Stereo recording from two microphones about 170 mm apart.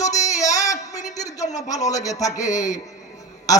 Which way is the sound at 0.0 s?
20° left (ahead or behind).